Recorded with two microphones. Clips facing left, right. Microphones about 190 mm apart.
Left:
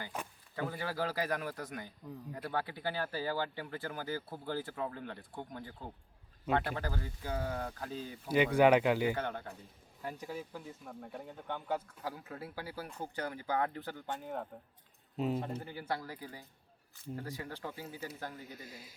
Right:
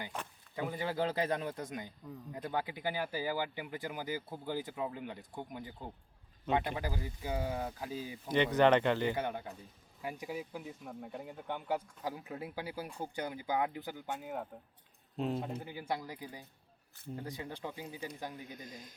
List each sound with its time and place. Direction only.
0.5 s a man's voice: 15° right (ahead or behind)
8.5 s speech: 10° left (ahead or behind)
9.1 s speech: 10° right (ahead or behind)
15.1 s speech: 5° left (ahead or behind)
15.4 s speech: 10° right (ahead or behind)
18.5 s speech: 5° left (ahead or behind)